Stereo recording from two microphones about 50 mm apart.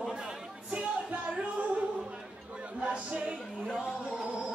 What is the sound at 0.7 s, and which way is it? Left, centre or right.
Music, right.